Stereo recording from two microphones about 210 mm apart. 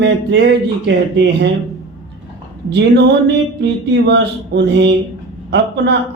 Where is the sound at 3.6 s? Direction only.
55° right (ahead or behind).